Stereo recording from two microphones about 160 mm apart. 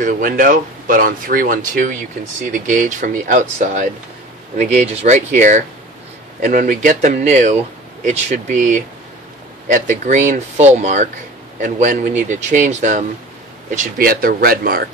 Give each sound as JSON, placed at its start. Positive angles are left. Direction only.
{"t": 0.0, "sound": "speech", "side_deg": -60}
{"t": 13.7, "sound": "speech", "side_deg": -65}